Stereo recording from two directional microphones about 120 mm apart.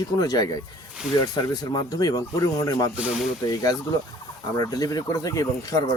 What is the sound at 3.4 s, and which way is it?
Speech, 30° left (ahead or behind).